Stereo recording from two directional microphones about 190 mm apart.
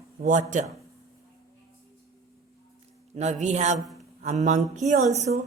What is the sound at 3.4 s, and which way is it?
Speech, 35° right (ahead or behind).